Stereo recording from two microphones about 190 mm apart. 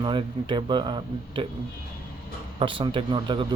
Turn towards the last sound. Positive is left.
turn(degrees=-25)  # may be behind; listen again after turning